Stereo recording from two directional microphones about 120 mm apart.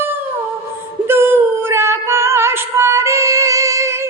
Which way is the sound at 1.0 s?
20° right (ahead or behind).